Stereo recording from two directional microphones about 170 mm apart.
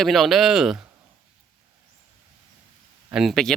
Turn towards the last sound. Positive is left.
turn(degrees=0)  # may be behind; listen again after turning